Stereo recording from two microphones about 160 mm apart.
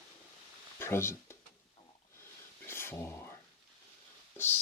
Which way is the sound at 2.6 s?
15° left (ahead or behind).